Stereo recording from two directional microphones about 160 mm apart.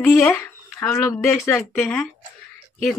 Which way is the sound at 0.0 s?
15° left (ahead or behind).